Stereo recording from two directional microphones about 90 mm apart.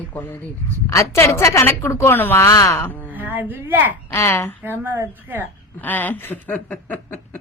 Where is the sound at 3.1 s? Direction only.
20° right (ahead or behind).